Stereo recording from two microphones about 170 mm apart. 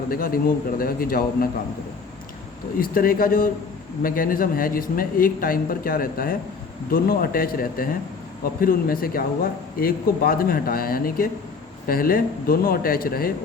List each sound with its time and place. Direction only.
0.1 s a man's voice: 60° left (ahead or behind)
2.7 s a man's voice: 55° left (ahead or behind)